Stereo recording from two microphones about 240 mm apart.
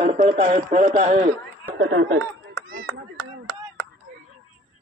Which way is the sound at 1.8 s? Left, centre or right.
Right.